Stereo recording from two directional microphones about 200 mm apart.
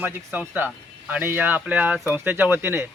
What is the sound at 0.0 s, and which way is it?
Speech, 10° right (ahead or behind).